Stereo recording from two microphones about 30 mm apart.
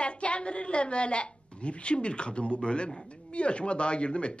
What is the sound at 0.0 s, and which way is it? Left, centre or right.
A woman's voice, left.